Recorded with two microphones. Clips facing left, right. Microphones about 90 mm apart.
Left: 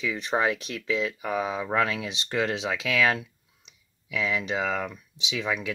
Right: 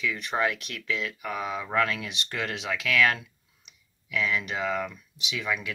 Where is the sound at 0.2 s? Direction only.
30° left (ahead or behind).